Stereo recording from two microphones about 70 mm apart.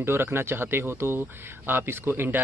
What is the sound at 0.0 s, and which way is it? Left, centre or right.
Speech, right.